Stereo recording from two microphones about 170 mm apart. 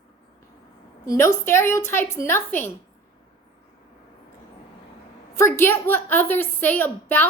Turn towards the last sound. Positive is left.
turn(degrees=10)  # may be behind; listen again after turning